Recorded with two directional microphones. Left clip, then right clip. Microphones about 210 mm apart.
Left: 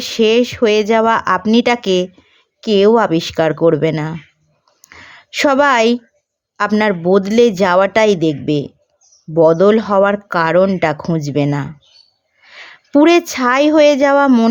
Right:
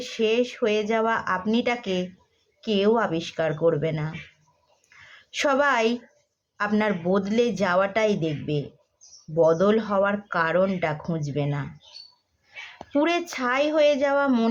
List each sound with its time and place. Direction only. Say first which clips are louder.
0.0 s speech: left 10 dB; 45° left (ahead or behind)
4.8 s a sound: left 11 dB; 40° left (ahead or behind)
6.6 s speech: left 10 dB; 40° left (ahead or behind)